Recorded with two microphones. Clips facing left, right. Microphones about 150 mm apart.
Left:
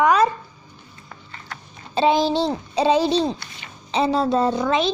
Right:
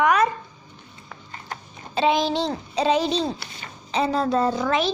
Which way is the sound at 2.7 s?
30° left (ahead or behind).